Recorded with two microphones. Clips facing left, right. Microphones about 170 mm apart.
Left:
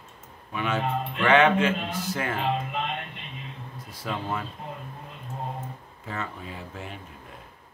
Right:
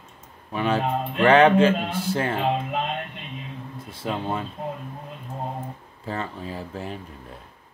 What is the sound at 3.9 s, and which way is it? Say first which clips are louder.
Speech: right 4 dB; 25° right (ahead or behind).